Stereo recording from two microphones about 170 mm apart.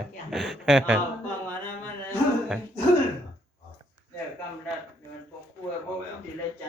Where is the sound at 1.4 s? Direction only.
10° left (ahead or behind).